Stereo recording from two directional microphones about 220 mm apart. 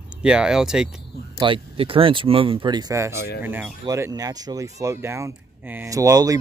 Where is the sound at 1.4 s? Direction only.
25° right (ahead or behind).